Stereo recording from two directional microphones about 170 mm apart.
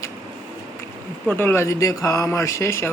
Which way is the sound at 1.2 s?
15° left (ahead or behind).